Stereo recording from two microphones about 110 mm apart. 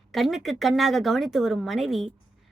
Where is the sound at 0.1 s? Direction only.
Centre (ahead or behind).